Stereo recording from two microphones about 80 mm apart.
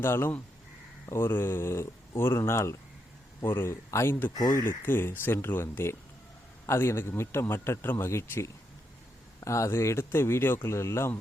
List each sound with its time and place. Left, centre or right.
0.0 s speech: left